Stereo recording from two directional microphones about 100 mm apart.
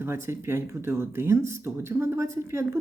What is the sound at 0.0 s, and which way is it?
Speech, 25° right (ahead or behind).